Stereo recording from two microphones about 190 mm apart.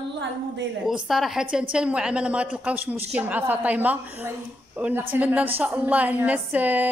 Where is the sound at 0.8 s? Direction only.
Centre (ahead or behind).